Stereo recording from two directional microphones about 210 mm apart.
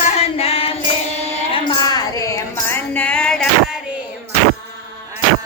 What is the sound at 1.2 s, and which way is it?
Music, 25° left (ahead or behind).